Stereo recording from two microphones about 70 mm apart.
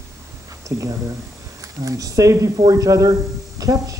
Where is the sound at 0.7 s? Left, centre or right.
Right.